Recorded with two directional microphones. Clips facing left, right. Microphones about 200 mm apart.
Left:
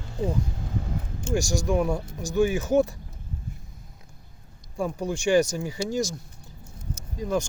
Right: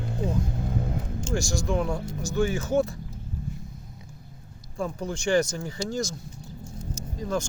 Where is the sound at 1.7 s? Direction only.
10° left (ahead or behind).